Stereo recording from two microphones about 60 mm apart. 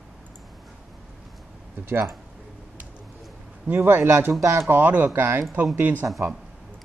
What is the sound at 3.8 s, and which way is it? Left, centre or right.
Speech, right.